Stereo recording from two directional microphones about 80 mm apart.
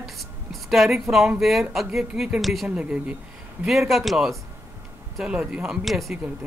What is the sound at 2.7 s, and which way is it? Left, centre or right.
Speech, centre.